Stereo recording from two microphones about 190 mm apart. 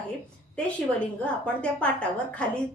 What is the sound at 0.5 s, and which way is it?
A woman's voice, 5° left (ahead or behind).